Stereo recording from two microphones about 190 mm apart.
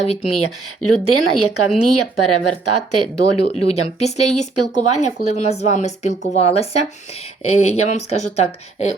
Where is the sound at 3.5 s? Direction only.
35° left (ahead or behind).